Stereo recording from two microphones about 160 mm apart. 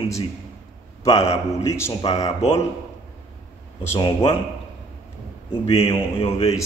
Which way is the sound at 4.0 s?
30° left (ahead or behind).